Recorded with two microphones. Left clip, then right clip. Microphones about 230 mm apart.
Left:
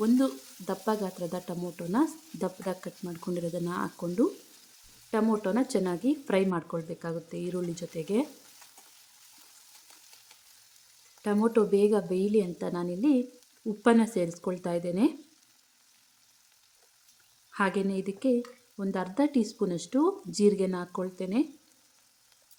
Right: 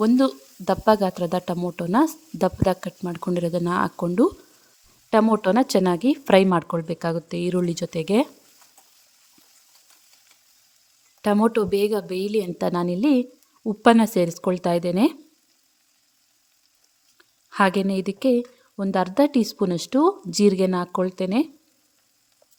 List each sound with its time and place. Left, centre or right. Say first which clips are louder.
0.0 s speech: right 7 dB; right
11.2 s speech: right 6 dB; right
17.5 s speech: right 8 dB; right